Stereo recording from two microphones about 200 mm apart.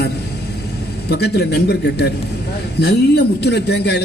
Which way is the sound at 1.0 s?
55° left (ahead or behind).